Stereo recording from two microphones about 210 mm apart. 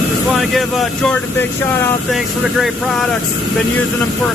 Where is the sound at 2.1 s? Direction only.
Centre (ahead or behind).